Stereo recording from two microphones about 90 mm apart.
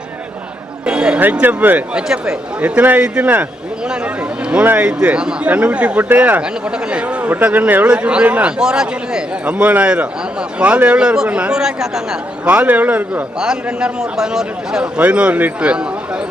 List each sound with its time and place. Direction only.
0.9 s a sound: 10° right (ahead or behind)
1.2 s speech: 20° right (ahead or behind)
2.0 s a man's voice: 10° right (ahead or behind)
4.4 s a man's voice: 15° right (ahead or behind)
13.4 s a man's voice: 10° right (ahead or behind)